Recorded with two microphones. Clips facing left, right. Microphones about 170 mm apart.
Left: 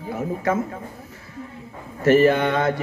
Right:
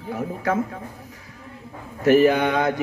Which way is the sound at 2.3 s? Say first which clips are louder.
Even; centre (ahead or behind).